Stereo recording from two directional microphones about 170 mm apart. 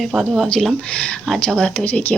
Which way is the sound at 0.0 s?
Centre (ahead or behind).